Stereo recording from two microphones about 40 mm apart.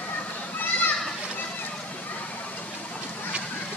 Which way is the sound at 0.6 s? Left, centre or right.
Left.